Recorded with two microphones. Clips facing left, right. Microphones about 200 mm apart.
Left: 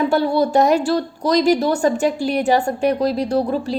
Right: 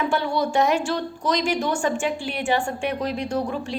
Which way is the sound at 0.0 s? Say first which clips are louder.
Left 6 dB; 35° left (ahead or behind).